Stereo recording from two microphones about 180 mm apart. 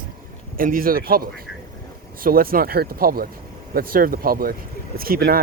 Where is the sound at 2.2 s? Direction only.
55° right (ahead or behind).